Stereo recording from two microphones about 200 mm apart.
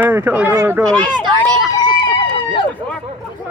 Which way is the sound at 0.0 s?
10° right (ahead or behind).